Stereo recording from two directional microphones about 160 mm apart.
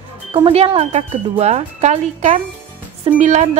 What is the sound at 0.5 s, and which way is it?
Speech, 40° right (ahead or behind).